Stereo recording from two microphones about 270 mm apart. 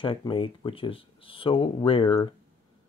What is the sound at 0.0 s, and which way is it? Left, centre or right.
Speech, centre.